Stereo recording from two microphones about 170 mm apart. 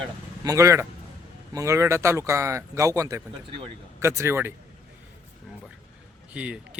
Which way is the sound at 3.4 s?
30° right (ahead or behind).